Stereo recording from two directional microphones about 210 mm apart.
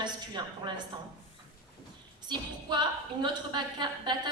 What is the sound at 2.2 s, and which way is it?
A woman's voice, 20° right (ahead or behind).